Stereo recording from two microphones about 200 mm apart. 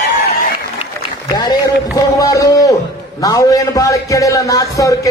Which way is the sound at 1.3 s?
20° left (ahead or behind).